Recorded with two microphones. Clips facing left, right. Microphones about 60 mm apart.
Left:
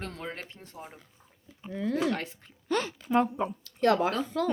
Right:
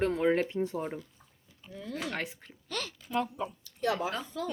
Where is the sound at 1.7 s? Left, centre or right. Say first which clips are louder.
Left 9 dB; left.